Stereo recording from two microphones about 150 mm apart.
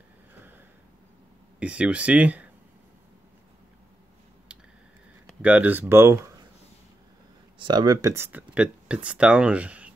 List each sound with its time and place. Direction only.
0.3 s a sound: 15° right (ahead or behind)
1.6 s speech: 10° right (ahead or behind)
5.4 s speech: 10° right (ahead or behind)
7.5 s speech: 30° right (ahead or behind); by 9.8 s 10° right (ahead or behind)